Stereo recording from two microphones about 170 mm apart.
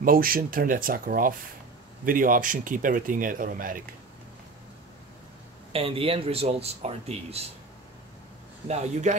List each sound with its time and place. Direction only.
0.0 s speech: 55° right (ahead or behind)
5.7 s speech: 35° right (ahead or behind)
8.6 s speech: 40° right (ahead or behind)